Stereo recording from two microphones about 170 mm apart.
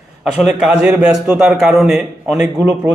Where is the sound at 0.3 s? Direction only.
5° right (ahead or behind).